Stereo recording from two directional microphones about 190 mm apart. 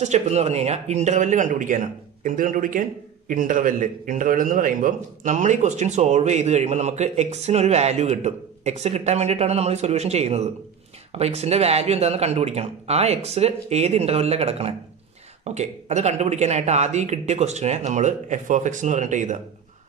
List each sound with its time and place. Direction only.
0.0 s a man's voice: 35° right (ahead or behind)